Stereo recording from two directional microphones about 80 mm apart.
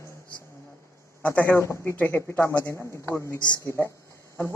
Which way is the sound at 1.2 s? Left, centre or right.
Centre.